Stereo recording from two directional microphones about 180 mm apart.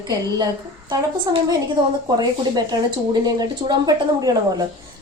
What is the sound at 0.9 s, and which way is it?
Speech, 25° right (ahead or behind).